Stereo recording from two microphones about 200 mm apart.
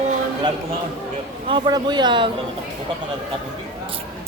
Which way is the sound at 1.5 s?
25° right (ahead or behind).